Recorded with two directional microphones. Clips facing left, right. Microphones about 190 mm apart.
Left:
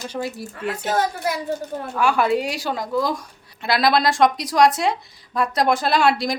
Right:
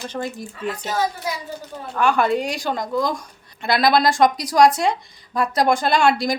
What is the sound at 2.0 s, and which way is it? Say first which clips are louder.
A woman's voice: right 1 dB; 5° left (ahead or behind).